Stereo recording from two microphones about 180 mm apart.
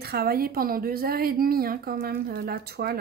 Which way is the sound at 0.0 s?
60° right (ahead or behind).